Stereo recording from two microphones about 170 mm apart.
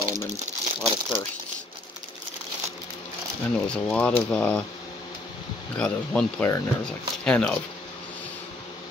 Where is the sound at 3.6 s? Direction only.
5° left (ahead or behind).